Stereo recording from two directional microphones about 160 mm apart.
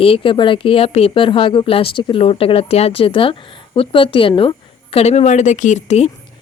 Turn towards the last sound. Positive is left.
turn(degrees=45)  # may be behind; listen again after turning